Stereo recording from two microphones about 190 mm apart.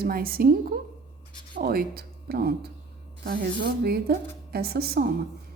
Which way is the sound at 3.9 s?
55° right (ahead or behind).